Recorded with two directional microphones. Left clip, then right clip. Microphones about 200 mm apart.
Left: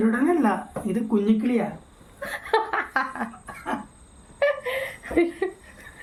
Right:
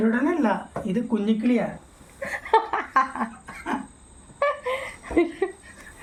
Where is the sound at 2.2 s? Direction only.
Centre (ahead or behind).